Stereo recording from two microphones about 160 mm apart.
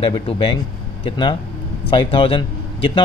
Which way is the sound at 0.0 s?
35° left (ahead or behind).